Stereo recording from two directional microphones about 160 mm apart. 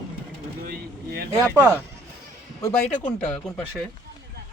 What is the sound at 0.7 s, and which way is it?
Vehicle, 70° right (ahead or behind).